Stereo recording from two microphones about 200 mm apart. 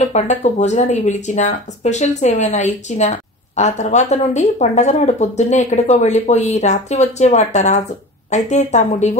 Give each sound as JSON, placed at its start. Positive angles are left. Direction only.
{"t": 0.0, "sound": "speech", "side_deg": 35}